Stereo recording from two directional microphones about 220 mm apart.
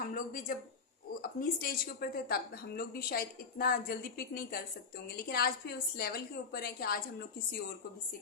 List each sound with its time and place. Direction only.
0.1 s a woman's voice: 40° left (ahead or behind)